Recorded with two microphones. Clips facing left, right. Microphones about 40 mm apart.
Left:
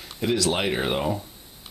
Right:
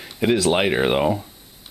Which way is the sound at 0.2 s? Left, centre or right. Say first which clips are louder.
Right 5 dB; right.